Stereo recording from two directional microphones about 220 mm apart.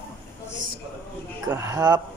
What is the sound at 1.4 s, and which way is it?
Speech, 15° right (ahead or behind).